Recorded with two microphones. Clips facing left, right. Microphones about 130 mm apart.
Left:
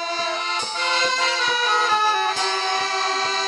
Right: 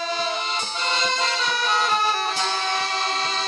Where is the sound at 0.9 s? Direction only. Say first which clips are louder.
Left 2 dB; centre (ahead or behind).